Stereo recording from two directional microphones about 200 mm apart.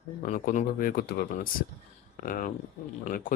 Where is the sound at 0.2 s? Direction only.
45° left (ahead or behind).